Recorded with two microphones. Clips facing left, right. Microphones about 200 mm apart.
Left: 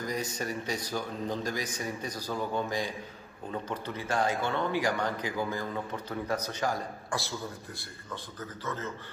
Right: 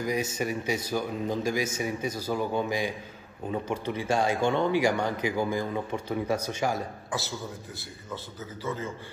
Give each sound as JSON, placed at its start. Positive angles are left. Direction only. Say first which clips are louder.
{"t": 0.2, "sound": "speech", "louder": "right 4 dB", "side_deg": -20}
{"t": 1.6, "sound": "a man's voice", "louder": "right 6 dB", "side_deg": -25}
{"t": 2.0, "sound": "speech", "louder": "right 4 dB", "side_deg": -5}